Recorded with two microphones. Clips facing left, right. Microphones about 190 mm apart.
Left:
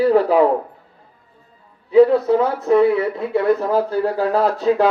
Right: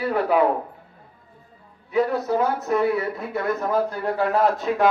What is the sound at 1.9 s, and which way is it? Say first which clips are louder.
Speech: left 9 dB; 30° left (ahead or behind).